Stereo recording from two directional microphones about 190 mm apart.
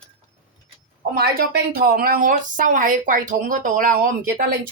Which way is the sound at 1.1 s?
55° right (ahead or behind).